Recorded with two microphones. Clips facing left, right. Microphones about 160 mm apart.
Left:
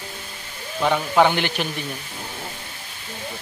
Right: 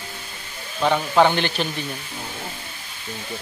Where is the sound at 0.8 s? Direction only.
15° right (ahead or behind).